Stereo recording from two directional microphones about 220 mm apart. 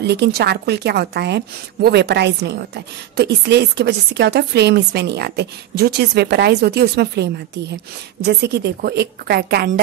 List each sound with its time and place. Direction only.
0.0 s a woman's voice: 50° right (ahead or behind)